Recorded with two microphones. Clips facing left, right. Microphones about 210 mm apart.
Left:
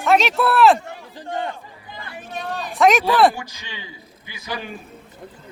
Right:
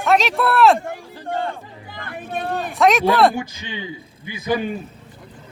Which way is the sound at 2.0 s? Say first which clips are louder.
Right 5 dB; 55° right (ahead or behind).